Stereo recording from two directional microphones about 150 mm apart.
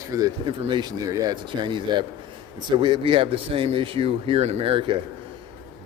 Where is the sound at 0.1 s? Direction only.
25° right (ahead or behind).